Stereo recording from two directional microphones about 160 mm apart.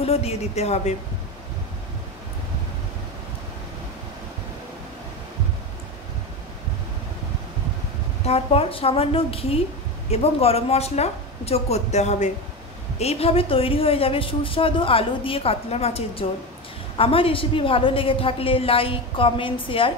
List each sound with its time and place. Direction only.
0.0 s a woman's voice: 40° left (ahead or behind)
8.3 s a woman's voice: 35° left (ahead or behind)